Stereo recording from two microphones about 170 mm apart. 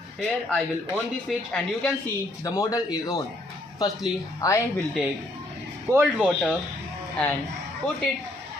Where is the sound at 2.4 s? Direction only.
20° left (ahead or behind).